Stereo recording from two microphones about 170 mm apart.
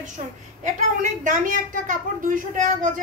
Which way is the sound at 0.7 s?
50° right (ahead or behind).